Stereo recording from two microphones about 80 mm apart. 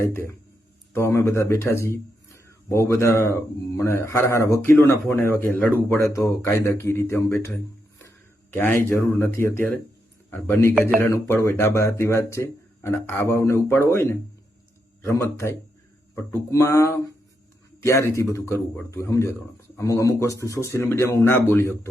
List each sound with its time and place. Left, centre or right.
0.0 s speech: left
6.0 s speech: left
8.5 s speech: left
16.1 s speech: left
20.8 s speech: left